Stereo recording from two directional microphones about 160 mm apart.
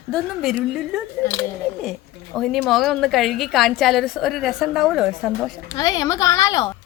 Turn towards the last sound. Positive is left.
turn(degrees=25)  # may be behind; listen again after turning